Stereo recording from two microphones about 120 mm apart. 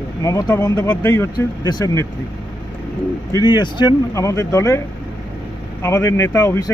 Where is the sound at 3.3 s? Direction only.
40° left (ahead or behind).